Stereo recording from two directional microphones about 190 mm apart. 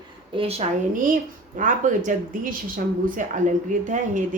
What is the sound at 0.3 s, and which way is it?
Speech, 30° right (ahead or behind).